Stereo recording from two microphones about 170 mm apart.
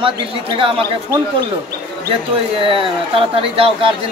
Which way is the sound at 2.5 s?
30° right (ahead or behind).